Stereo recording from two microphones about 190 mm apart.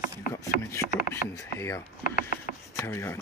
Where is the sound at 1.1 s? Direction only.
15° left (ahead or behind).